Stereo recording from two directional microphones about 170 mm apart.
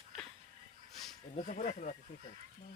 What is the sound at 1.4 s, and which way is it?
Speech, 45° left (ahead or behind).